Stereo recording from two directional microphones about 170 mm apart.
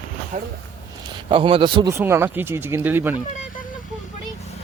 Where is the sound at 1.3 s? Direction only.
30° right (ahead or behind).